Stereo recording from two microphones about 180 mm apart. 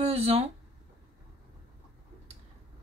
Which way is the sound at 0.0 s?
35° right (ahead or behind).